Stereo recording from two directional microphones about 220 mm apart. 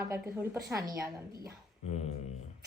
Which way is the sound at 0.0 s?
15° right (ahead or behind).